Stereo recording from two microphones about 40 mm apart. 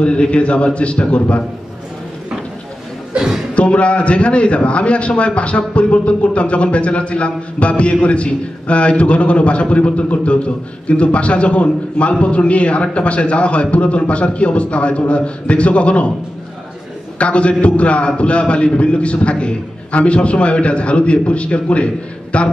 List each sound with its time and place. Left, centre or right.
0.0 s a man's voice: left
3.5 s a man's voice: left
17.2 s a man's voice: left